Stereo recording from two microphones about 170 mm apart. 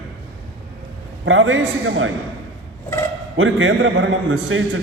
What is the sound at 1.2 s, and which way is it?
Speech, 90° right.